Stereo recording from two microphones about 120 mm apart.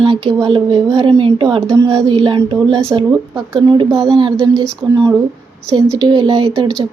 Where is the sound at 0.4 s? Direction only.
50° right (ahead or behind).